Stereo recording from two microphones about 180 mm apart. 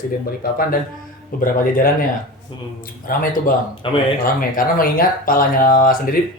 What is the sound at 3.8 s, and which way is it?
Speech, 30° left (ahead or behind).